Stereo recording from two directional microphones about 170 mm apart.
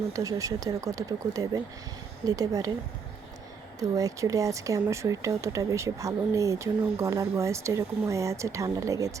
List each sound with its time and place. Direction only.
0.1 s speech: 20° right (ahead or behind)
3.8 s speech: 20° right (ahead or behind)